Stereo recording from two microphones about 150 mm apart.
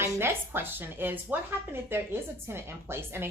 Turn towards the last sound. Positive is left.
turn(degrees=-15)  # may be behind; listen again after turning